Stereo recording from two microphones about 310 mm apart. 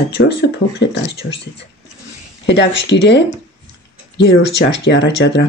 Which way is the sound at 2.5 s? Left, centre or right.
Left.